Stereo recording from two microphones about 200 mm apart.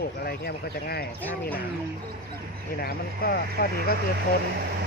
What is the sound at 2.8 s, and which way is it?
Speech, 50° left (ahead or behind).